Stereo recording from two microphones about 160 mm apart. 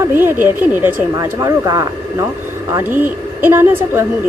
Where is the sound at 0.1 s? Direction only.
15° right (ahead or behind).